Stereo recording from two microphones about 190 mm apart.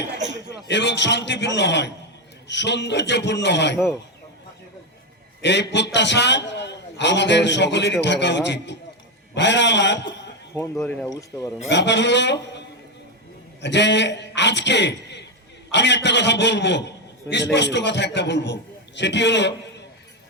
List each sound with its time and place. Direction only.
0.7 s a man's voice: 65° left (ahead or behind)
5.4 s a man's voice: 65° left (ahead or behind)
10.8 s speech: 5° left (ahead or behind)
11.1 s speech: 20° left (ahead or behind)
11.7 s a man's voice: 65° left (ahead or behind)